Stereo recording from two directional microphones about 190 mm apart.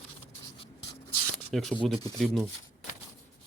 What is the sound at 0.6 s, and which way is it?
Writing, 25° left (ahead or behind).